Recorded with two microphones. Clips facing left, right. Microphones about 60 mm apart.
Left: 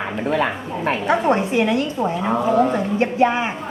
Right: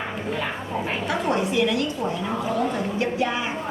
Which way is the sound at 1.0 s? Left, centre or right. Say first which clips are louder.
Left 6 dB; left.